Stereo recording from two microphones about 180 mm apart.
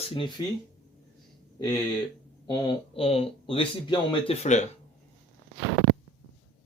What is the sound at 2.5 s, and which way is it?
Speech, 25° left (ahead or behind).